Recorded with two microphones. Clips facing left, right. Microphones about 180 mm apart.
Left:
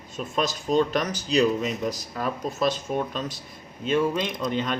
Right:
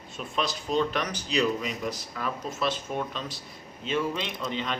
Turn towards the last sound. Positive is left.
turn(degrees=45)  # may be behind; listen again after turning